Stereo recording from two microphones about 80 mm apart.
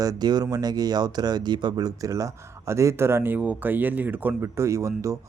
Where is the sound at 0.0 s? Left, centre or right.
Right.